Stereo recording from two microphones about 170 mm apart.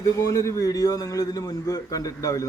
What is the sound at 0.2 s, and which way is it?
A man's voice, 20° left (ahead or behind).